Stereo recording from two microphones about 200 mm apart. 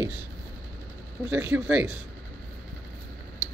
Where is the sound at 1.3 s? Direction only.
10° right (ahead or behind).